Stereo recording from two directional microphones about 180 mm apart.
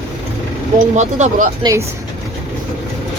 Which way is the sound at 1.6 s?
15° right (ahead or behind).